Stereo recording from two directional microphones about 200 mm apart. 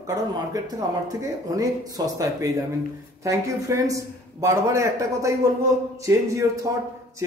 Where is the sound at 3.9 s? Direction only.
15° right (ahead or behind).